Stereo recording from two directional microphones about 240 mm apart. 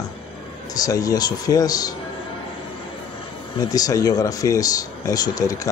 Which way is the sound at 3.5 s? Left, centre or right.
Centre.